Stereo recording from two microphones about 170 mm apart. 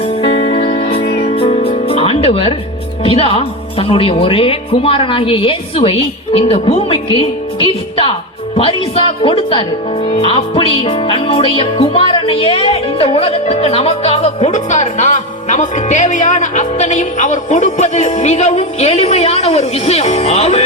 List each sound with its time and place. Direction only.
0.0 s music: 35° left (ahead or behind)
3.0 s speech: 35° left (ahead or behind)